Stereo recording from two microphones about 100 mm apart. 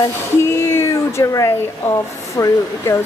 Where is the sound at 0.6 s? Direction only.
25° left (ahead or behind).